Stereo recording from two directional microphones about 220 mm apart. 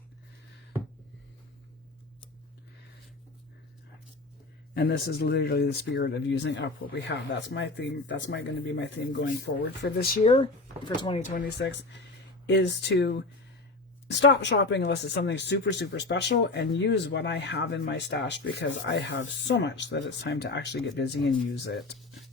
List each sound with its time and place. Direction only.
4.7 s speech: 45° left (ahead or behind)
10.2 s speech: 25° left (ahead or behind)
11.3 s speech: 50° left (ahead or behind)
21.9 s a sound: centre (ahead or behind)